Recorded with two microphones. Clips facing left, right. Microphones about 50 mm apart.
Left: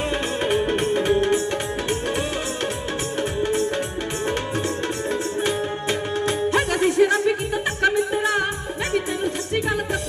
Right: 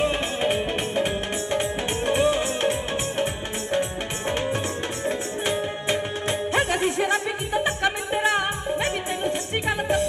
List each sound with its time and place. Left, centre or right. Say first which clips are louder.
0.4 s music: left 4 dB; centre
5.0 s music: left 1 dB; right